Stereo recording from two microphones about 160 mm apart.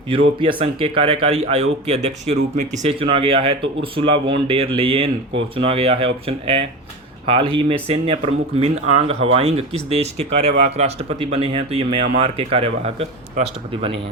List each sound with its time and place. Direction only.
0.1 s speech: 35° right (ahead or behind)